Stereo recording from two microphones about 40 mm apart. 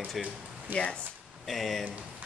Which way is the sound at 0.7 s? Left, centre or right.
Right.